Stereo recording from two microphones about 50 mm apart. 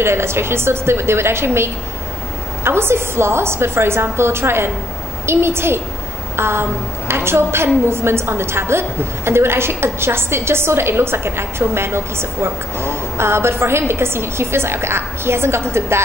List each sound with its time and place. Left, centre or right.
0.0 s a woman's voice: right